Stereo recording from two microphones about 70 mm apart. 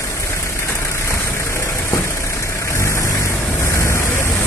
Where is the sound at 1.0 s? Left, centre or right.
Left.